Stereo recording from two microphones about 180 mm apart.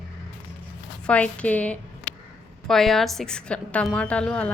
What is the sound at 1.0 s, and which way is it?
A woman's voice, 5° left (ahead or behind).